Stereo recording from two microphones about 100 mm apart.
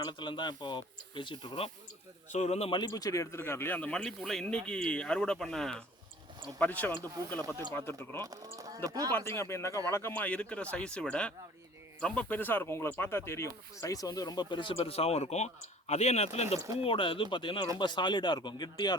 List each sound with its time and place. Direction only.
0.0 s speech: 50° left (ahead or behind)
2.4 s a man's voice: 90° left
2.9 s speech: 35° left (ahead or behind); by 5.8 s 5° left (ahead or behind)
6.6 s speech: 20° left (ahead or behind)
8.2 s speech: 40° right (ahead or behind)
9.1 s speech: 25° left (ahead or behind)
10.1 s speech: 15° left (ahead or behind); by 16.6 s 90° left
16.7 s speech: 65° left (ahead or behind); by 18.9 s 45° left (ahead or behind)